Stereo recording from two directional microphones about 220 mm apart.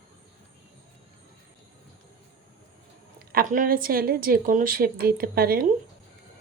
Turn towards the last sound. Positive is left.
turn(degrees=-45)  # may be behind; listen again after turning